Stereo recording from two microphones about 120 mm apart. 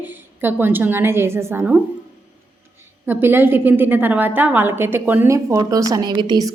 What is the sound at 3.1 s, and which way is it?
A woman's voice, 20° right (ahead or behind).